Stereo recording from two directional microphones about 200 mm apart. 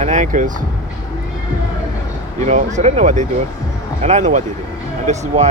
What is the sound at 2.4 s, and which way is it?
Speech, 35° right (ahead or behind).